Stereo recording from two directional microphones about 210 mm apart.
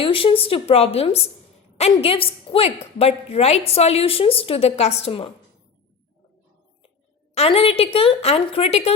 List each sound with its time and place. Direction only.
0.0 s a woman's voice: 25° left (ahead or behind)
7.3 s a woman's voice: 25° left (ahead or behind)